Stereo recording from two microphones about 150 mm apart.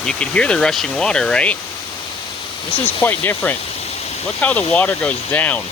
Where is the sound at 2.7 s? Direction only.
40° left (ahead or behind).